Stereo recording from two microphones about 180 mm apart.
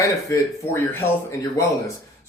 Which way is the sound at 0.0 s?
15° left (ahead or behind).